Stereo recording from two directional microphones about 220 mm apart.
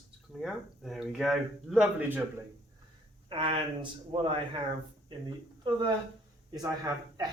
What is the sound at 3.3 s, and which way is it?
Speech, 25° right (ahead or behind).